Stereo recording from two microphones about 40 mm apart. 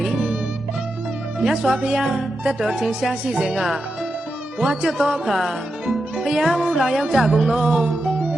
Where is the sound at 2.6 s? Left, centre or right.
Centre.